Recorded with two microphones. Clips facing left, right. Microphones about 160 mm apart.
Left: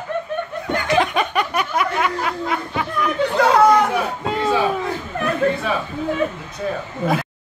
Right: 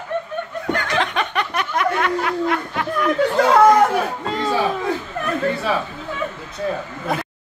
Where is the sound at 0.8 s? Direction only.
10° left (ahead or behind).